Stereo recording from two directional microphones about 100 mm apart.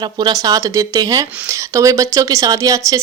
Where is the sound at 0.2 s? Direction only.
40° right (ahead or behind).